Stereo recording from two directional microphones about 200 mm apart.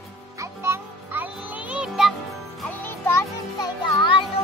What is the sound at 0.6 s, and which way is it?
Music, 10° right (ahead or behind).